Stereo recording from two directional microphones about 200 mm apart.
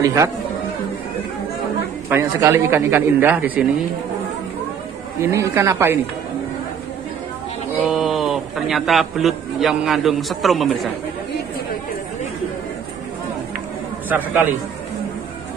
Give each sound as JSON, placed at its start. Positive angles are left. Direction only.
{"t": 0.0, "sound": "a man's voice", "side_deg": -15}
{"t": 2.0, "sound": "a man's voice", "side_deg": -10}
{"t": 5.2, "sound": "a man's voice", "side_deg": -15}
{"t": 7.8, "sound": "a man's voice", "side_deg": -5}
{"t": 14.0, "sound": "a man's voice", "side_deg": -10}